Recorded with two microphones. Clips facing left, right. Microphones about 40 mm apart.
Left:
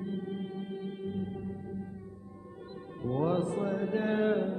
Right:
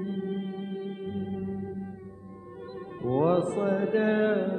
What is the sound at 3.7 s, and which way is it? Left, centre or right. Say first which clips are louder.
Mantra: right 6 dB; right.